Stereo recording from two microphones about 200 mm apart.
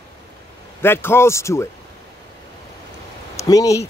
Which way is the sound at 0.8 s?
10° left (ahead or behind).